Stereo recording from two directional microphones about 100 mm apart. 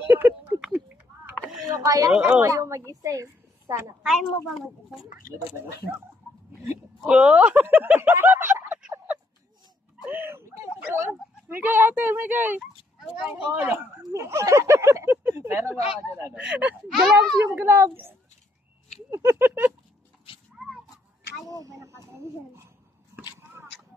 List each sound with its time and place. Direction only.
0.0 s a sound: 20° right (ahead or behind)
1.7 s a sound: 35° right (ahead or behind)
2.1 s speech: 10° right (ahead or behind)
2.4 s a woman's voice: 30° right (ahead or behind)
4.0 s a woman's voice: 5° right (ahead or behind)
7.0 s speech: 10° right (ahead or behind)
8.9 s a sound: 15° right (ahead or behind)
13.2 s speech: 20° right (ahead or behind)
16.3 s speech: 15° right (ahead or behind)
16.9 s speech: centre (ahead or behind)
17.5 s speech: 25° right (ahead or behind)
21.5 s speech: 35° right (ahead or behind)
23.1 s a sound: 30° right (ahead or behind)